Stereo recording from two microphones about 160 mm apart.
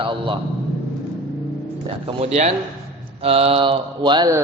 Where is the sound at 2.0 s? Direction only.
40° right (ahead or behind).